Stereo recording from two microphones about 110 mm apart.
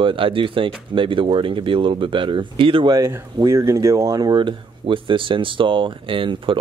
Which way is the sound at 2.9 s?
25° right (ahead or behind).